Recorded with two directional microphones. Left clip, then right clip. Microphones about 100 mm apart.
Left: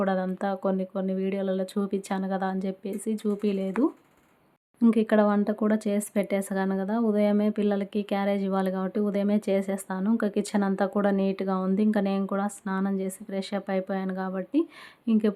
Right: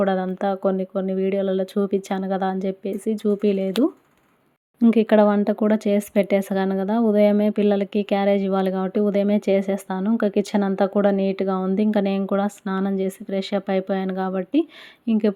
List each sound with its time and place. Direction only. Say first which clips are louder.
0.0 s speech: right 6 dB; 30° right (ahead or behind)
4.8 s speech: right 6 dB; 40° right (ahead or behind)
15.0 s speech: right 4 dB; 25° right (ahead or behind)